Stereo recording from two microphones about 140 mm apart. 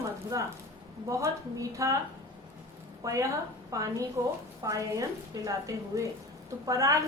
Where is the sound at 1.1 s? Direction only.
20° right (ahead or behind).